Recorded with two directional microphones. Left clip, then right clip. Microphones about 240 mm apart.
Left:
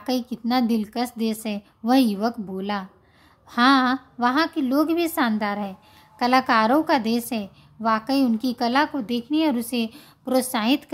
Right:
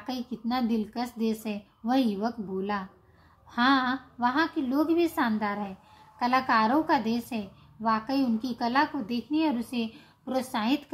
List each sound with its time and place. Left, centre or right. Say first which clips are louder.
0.0 s a woman's voice: left 8 dB; left